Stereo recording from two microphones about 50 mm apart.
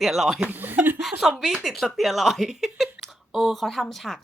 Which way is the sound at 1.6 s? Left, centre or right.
Centre.